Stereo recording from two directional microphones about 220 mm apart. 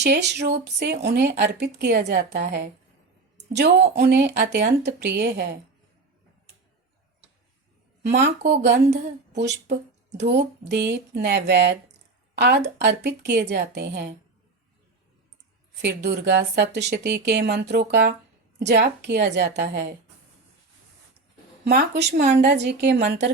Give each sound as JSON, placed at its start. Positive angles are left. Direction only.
{"t": 0.0, "sound": "a woman's voice", "side_deg": -50}
{"t": 8.1, "sound": "speech", "side_deg": -50}
{"t": 15.8, "sound": "speech", "side_deg": -50}
{"t": 21.6, "sound": "speech", "side_deg": -45}